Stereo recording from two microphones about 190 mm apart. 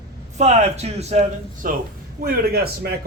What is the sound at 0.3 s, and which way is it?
Speech, 35° right (ahead or behind).